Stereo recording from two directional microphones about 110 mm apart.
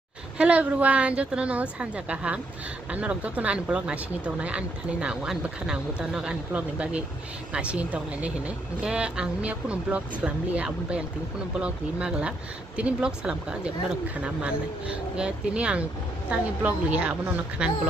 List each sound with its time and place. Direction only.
0.4 s speech: 10° right (ahead or behind)